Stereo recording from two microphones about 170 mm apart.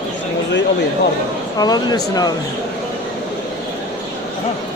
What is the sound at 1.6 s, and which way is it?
Speech, 25° left (ahead or behind).